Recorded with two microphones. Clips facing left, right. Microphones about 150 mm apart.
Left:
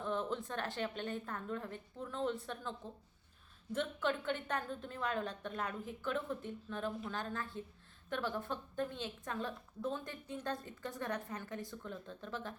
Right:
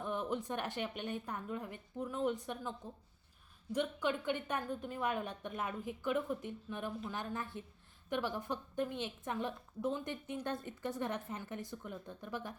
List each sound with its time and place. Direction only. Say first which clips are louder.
0.0 s a woman's voice: even; 15° right (ahead or behind)